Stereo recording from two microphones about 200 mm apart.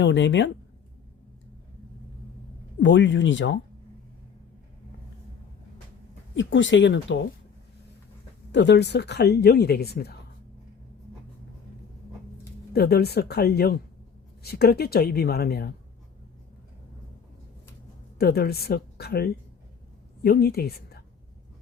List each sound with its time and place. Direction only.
0.0 s speech: 65° left (ahead or behind)
2.8 s speech: 65° left (ahead or behind)
6.3 s speech: 70° left (ahead or behind)
8.5 s speech: 60° left (ahead or behind)
12.7 s speech: 50° left (ahead or behind)
18.2 s a woman's voice: 50° left (ahead or behind)